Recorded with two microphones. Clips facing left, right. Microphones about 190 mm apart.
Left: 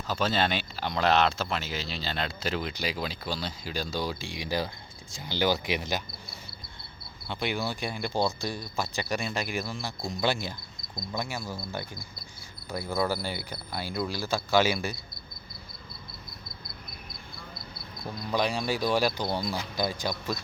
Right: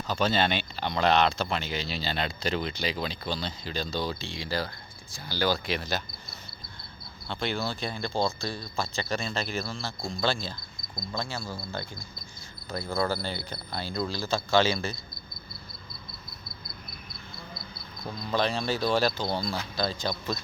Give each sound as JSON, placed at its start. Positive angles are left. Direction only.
{"t": 0.1, "sound": "speech", "side_deg": 0}
{"t": 7.3, "sound": "speech", "side_deg": 15}
{"t": 11.1, "sound": "speech", "side_deg": 15}
{"t": 12.7, "sound": "speech", "side_deg": 15}
{"t": 18.1, "sound": "speech", "side_deg": 10}